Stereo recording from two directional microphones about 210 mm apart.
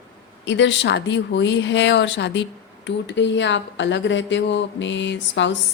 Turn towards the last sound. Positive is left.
turn(degrees=60)  # may be behind; listen again after turning